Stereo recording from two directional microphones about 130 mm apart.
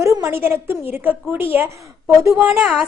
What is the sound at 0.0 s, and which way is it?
A woman's voice, 25° right (ahead or behind).